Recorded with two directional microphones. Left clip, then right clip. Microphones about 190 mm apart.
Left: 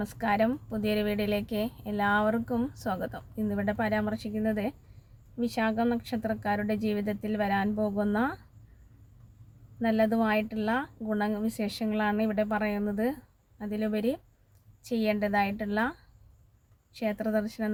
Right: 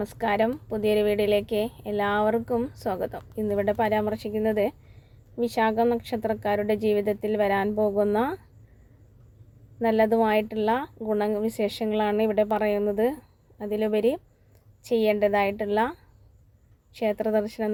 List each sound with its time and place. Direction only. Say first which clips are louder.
0.0 s a woman's voice: right 3 dB; 15° right (ahead or behind)
9.8 s a woman's voice: right 5 dB; 15° right (ahead or behind)